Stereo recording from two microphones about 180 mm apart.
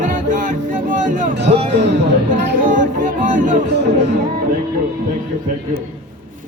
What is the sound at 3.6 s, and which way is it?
Speech, 75° right (ahead or behind).